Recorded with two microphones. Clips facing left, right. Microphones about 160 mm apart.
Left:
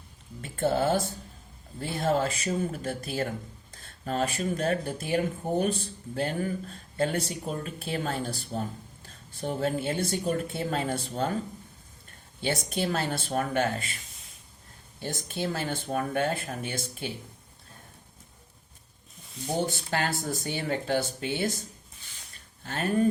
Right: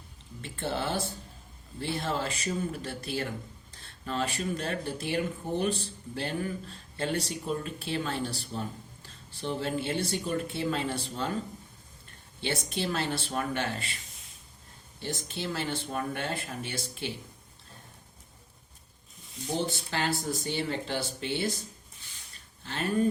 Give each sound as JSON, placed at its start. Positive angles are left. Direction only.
{"t": 0.4, "sound": "speech", "side_deg": 45}
{"t": 12.4, "sound": "speech", "side_deg": 45}
{"t": 14.9, "sound": "speech", "side_deg": 50}
{"t": 19.5, "sound": "speech", "side_deg": 50}
{"t": 22.6, "sound": "speech", "side_deg": 50}